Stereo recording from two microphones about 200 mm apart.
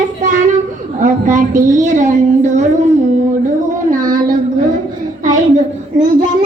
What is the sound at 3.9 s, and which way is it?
Child singing, 45° right (ahead or behind).